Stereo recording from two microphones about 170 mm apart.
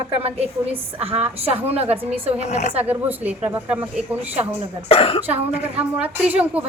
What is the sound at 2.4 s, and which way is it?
Speech, 40° left (ahead or behind).